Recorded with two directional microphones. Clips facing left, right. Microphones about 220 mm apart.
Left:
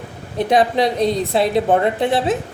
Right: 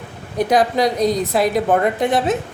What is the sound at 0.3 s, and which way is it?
A woman's voice, 25° left (ahead or behind).